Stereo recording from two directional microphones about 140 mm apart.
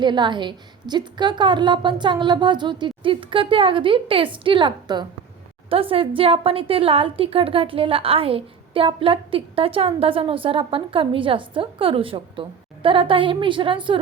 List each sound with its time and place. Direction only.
0.0 s a woman's voice: 35° right (ahead or behind)